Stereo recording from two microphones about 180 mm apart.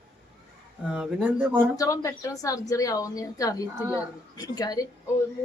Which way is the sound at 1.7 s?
20° left (ahead or behind).